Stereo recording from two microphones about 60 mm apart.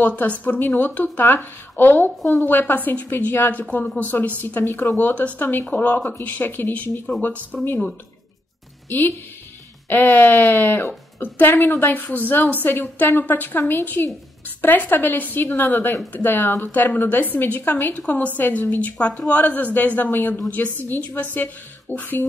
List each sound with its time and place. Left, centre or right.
0.0 s a woman's voice: left
8.8 s a woman's voice: left